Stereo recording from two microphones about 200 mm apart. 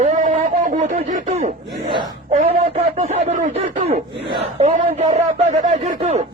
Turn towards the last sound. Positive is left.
turn(degrees=-35)  # may be behind; listen again after turning